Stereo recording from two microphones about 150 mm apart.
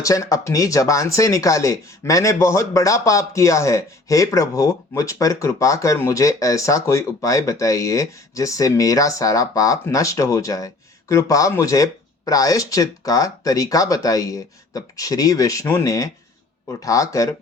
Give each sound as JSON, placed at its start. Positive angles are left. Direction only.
{"t": 0.0, "sound": "speech", "side_deg": 20}